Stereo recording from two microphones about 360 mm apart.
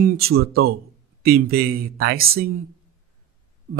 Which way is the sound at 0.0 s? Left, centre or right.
Right.